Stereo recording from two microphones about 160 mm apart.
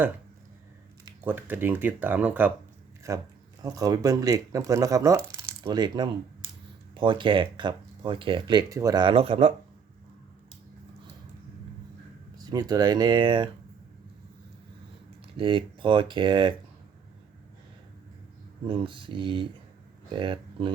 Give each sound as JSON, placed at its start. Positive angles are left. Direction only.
{"t": 1.2, "sound": "speech", "side_deg": -10}
{"t": 3.6, "sound": "speech", "side_deg": -20}
{"t": 12.4, "sound": "speech", "side_deg": -25}
{"t": 15.4, "sound": "speech", "side_deg": -30}
{"t": 18.6, "sound": "speech", "side_deg": -30}